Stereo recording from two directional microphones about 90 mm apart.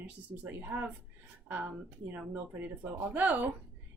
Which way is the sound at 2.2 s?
20° right (ahead or behind).